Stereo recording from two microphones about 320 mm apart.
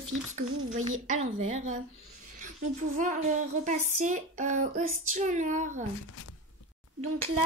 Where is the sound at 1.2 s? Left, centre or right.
Right.